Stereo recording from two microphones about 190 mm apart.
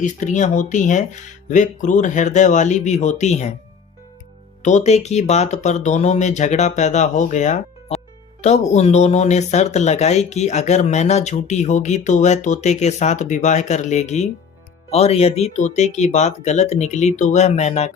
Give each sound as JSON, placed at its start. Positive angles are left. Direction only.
{"t": 0.0, "sound": "speech", "side_deg": 40}
{"t": 4.6, "sound": "speech", "side_deg": 35}